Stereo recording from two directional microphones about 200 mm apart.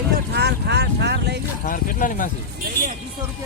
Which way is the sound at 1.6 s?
45° left (ahead or behind).